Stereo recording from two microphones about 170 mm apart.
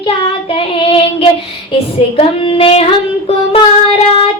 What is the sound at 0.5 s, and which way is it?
Child singing, 35° left (ahead or behind).